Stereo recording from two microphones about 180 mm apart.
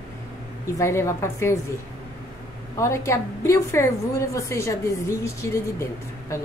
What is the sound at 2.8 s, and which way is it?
A woman's voice, 15° left (ahead or behind).